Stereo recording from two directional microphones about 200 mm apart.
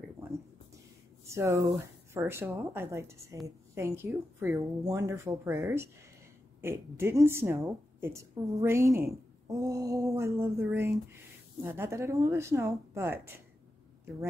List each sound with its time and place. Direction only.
1.2 s a woman's voice: 15° right (ahead or behind)